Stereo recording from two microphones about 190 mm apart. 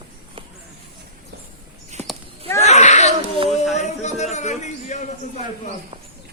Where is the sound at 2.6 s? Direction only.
35° left (ahead or behind).